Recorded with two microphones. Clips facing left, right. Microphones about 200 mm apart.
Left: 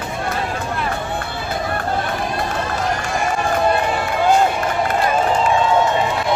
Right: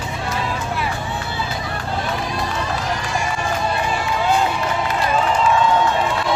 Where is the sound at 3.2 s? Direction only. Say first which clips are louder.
Left 7 dB; 55° left (ahead or behind).